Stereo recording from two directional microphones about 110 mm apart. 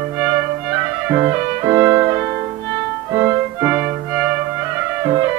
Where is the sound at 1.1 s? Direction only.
25° right (ahead or behind).